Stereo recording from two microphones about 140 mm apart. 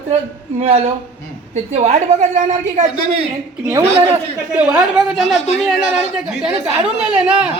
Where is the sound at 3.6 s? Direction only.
15° right (ahead or behind).